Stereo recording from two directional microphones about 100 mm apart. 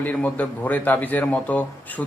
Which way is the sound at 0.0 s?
15° left (ahead or behind).